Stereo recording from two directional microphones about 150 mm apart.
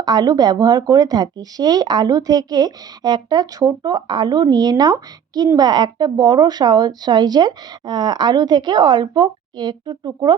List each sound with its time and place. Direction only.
0.0 s speech: 30° right (ahead or behind)